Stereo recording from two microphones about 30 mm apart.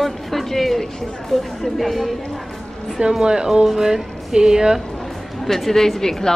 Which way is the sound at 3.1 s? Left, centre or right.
Right.